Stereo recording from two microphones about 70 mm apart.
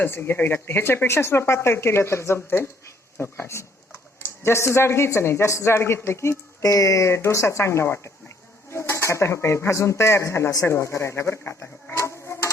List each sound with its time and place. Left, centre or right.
0.0 s speech: left
6.6 s speech: left
11.9 s a sound: left